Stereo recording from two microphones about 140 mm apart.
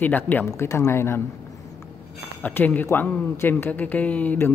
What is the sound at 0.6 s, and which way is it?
Speech, 20° left (ahead or behind).